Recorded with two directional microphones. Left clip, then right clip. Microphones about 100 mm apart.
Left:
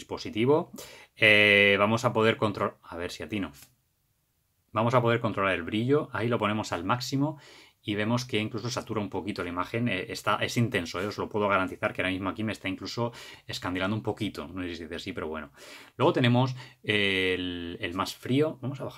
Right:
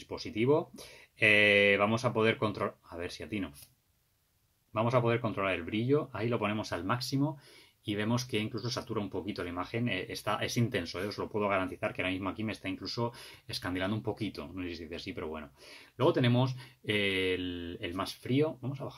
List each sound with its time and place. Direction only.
0.0 s speech: 30° left (ahead or behind)
4.7 s speech: 30° left (ahead or behind); by 8.6 s 15° left (ahead or behind)
8.6 s speech: 25° left (ahead or behind)
14.1 s speech: 35° left (ahead or behind)